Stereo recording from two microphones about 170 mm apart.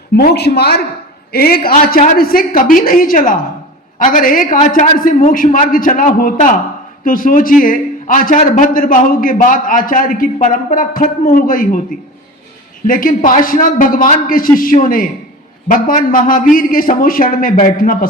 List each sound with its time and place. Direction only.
0.2 s a man's voice: 70° left (ahead or behind)
12.9 s a man's voice: 55° left (ahead or behind)